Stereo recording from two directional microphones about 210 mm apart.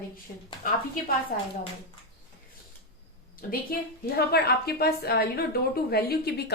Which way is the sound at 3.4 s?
45° left (ahead or behind).